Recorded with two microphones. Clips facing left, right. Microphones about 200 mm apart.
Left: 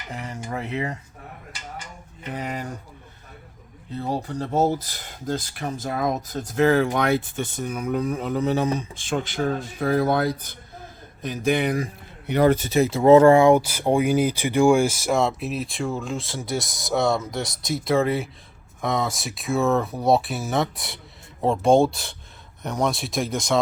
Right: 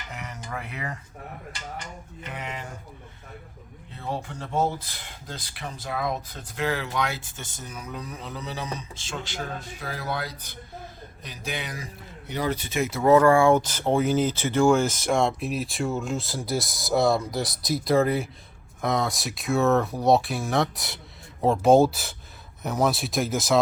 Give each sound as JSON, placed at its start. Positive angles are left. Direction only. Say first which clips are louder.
{"t": 0.1, "sound": "dishes", "louder": "left 5 dB", "side_deg": 30}
{"t": 2.3, "sound": "speech", "louder": "left 6 dB", "side_deg": 40}
{"t": 3.9, "sound": "speech", "louder": "left 6 dB", "side_deg": 40}
{"t": 13.0, "sound": "speech", "louder": "left 4 dB", "side_deg": 25}
{"t": 13.6, "sound": "speech", "louder": "left 2 dB", "side_deg": 10}